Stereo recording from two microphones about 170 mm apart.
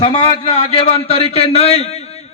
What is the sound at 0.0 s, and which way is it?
A man's voice, 25° left (ahead or behind).